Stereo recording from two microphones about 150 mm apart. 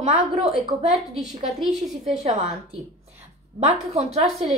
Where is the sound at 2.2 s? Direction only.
45° right (ahead or behind).